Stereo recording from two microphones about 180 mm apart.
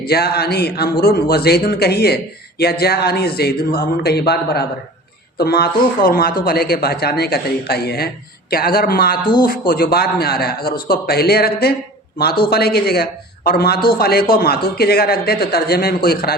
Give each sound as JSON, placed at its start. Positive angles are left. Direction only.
{"t": 0.0, "sound": "speech", "side_deg": 60}
{"t": 9.2, "sound": "speech", "side_deg": 25}
{"t": 9.5, "sound": "speech", "side_deg": 55}